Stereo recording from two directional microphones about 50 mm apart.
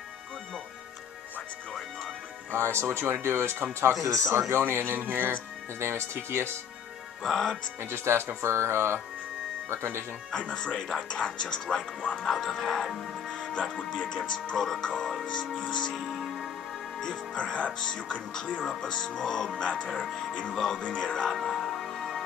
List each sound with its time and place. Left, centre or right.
2.5 s speech: right
4.0 s speech: right
4.7 s speech: right
5.8 s speech: right
7.2 s speech: centre
7.8 s speech: right
10.3 s speech: left; by 13.0 s centre
13.3 s speech: centre
15.9 s music: centre
17.0 s speech: centre
19.5 s speech: left
20.5 s speech: centre
21.3 s music: centre